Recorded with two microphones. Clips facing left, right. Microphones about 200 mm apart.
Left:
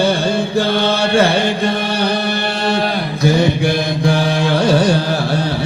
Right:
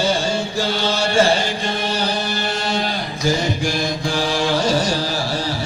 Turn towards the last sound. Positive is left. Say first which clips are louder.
# left 5 dB
turn(degrees=60)  # may be behind; listen again after turning